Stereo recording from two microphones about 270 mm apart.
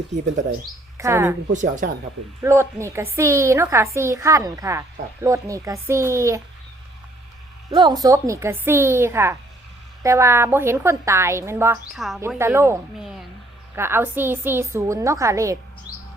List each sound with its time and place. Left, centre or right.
0.1 s speech: right
0.9 s a woman's voice: centre
1.5 s speech: right
2.4 s a woman's voice: centre
7.7 s a woman's voice: centre